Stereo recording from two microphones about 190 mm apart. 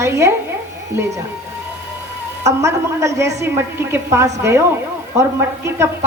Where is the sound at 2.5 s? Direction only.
15° right (ahead or behind).